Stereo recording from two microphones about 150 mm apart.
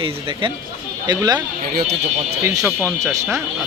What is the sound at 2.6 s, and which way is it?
Speech, 15° right (ahead or behind).